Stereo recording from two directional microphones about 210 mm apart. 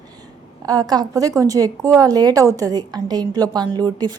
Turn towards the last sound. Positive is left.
turn(degrees=-20)  # may be behind; listen again after turning